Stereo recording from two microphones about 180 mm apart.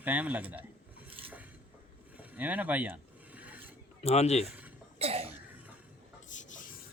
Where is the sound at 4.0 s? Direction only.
35° left (ahead or behind).